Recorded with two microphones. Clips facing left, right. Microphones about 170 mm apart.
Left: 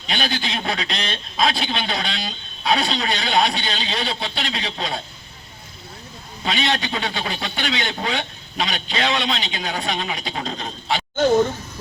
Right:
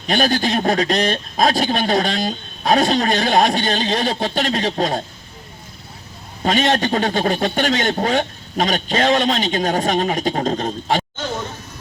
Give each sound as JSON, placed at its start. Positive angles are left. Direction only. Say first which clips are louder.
{"t": 0.0, "sound": "speech", "louder": "right 8 dB", "side_deg": -45}
{"t": 6.4, "sound": "speech", "louder": "right 6 dB", "side_deg": -45}